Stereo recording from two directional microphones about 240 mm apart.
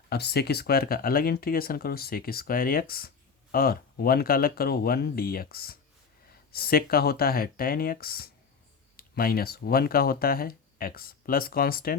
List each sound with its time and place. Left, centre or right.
0.1 s speech: left